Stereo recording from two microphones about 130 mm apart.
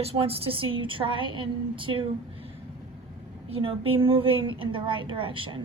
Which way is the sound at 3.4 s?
45° right (ahead or behind).